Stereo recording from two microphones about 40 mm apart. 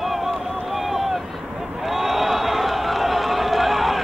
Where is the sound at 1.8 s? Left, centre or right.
Centre.